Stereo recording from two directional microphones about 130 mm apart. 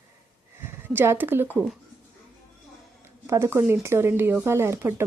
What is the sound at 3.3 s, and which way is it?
Speech, 20° right (ahead or behind).